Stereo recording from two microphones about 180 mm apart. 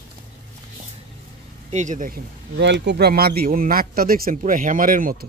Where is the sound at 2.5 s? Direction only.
70° right (ahead or behind); by 5.1 s 50° right (ahead or behind).